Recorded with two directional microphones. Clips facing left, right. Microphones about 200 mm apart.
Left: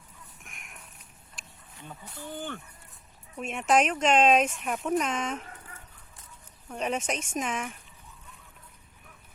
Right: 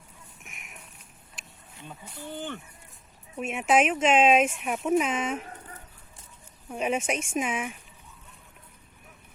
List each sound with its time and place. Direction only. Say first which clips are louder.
0.4 s a sound: right 2 dB; centre (ahead or behind)
1.4 s insect: right 1 dB; 5° right (ahead or behind)
2.1 s speech: right 1 dB; 20° right (ahead or behind)
3.3 s speech: right 1 dB; 5° right (ahead or behind)
6.7 s speech: right 3 dB; 5° right (ahead or behind)